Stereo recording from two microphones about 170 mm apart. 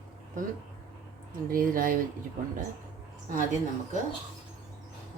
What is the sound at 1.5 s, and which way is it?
Speech, 55° right (ahead or behind).